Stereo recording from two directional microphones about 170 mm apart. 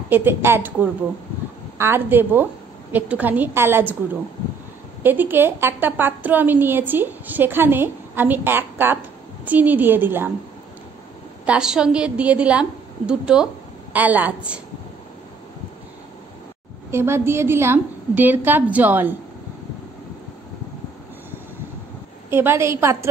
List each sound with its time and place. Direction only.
0.1 s a woman's voice: 10° right (ahead or behind)
11.4 s a woman's voice: 5° right (ahead or behind)
16.9 s a woman's voice: 15° right (ahead or behind)
22.3 s a woman's voice: 15° right (ahead or behind)